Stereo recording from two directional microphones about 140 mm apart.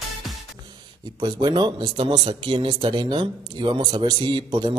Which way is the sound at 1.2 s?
30° right (ahead or behind).